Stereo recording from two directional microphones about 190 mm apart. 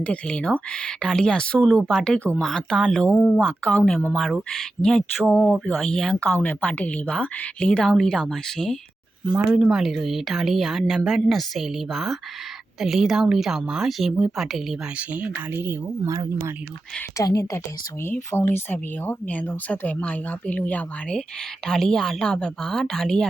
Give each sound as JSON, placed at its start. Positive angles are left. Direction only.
{"t": 0.0, "sound": "speech", "side_deg": 5}
{"t": 17.2, "sound": "speech", "side_deg": 20}